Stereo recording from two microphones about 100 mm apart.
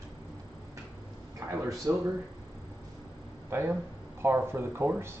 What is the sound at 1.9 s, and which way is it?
Speech, 25° right (ahead or behind).